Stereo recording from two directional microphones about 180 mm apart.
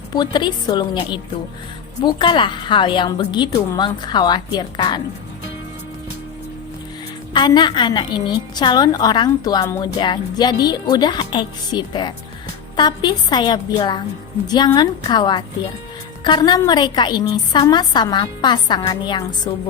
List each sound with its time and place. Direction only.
0.1 s a woman's voice: 25° left (ahead or behind)
7.3 s a woman's voice: 25° left (ahead or behind)